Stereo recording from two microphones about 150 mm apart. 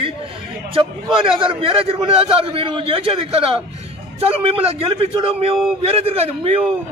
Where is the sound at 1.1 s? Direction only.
35° right (ahead or behind).